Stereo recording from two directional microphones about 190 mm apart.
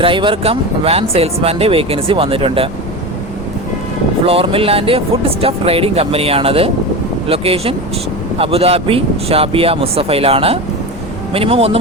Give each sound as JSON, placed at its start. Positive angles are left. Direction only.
{"t": 0.0, "sound": "speech", "side_deg": -25}
{"t": 4.3, "sound": "speech", "side_deg": -30}